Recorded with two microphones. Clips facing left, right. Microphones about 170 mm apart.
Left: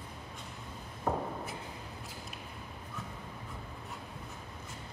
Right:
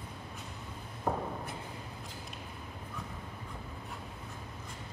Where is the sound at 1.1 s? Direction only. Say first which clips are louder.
Even; 5° left (ahead or behind).